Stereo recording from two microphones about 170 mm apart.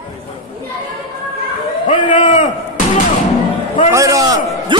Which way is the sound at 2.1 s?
45° left (ahead or behind).